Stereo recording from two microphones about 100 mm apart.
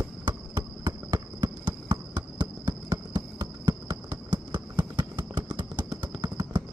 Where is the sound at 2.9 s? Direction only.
30° right (ahead or behind).